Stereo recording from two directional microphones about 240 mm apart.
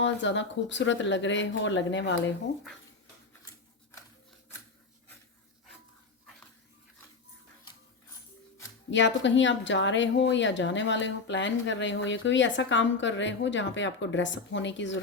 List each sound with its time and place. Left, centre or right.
0.0 s a woman's voice: left
8.9 s a woman's voice: left